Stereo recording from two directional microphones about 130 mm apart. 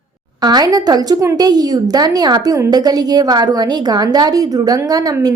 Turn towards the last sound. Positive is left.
turn(degrees=-30)  # may be behind; listen again after turning